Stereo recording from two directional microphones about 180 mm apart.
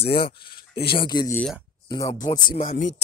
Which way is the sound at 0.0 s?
60° left (ahead or behind).